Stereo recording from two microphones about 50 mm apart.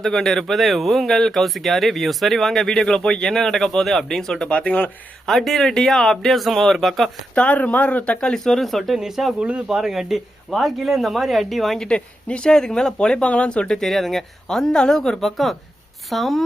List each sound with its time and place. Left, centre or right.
0.0 s speech: centre
4.4 s speech: left
5.2 s speech: centre
7.3 s speech: left
8.4 s speech: centre
9.4 s speech: right
9.6 s speech: centre
11.9 s speech: left
13.7 s speech: centre